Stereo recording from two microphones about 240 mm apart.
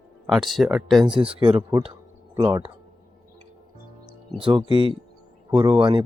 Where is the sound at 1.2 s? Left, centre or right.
Right.